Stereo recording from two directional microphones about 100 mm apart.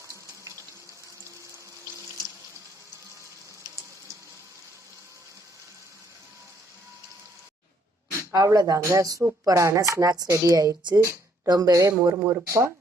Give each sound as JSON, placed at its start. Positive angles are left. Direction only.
{"t": 0.1, "sound": "water", "side_deg": -35}
{"t": 8.3, "sound": "speech", "side_deg": -35}